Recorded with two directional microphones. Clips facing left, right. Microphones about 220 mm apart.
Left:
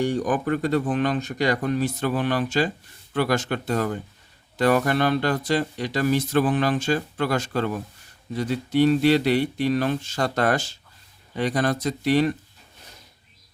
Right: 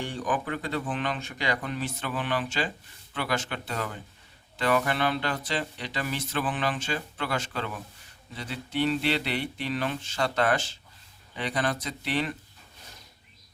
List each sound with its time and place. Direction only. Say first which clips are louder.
0.0 s speech: left 8 dB; 40° left (ahead or behind)